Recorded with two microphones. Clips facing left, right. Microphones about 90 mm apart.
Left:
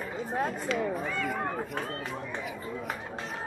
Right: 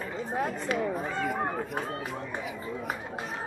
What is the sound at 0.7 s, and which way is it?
Speech, 40° right (ahead or behind).